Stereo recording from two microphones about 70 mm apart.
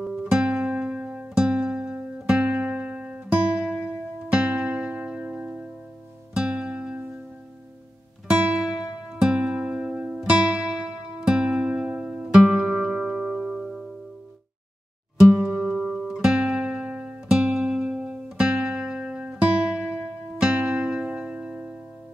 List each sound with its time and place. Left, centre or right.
0.0 s music: centre
8.3 s music: centre
15.3 s music: centre
16.1 s music: centre